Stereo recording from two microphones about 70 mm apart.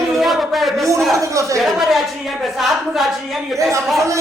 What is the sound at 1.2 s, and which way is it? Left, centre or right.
Speech, right.